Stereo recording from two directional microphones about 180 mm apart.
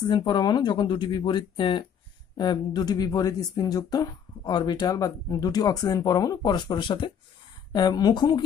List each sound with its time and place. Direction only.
0.1 s speech: 25° left (ahead or behind)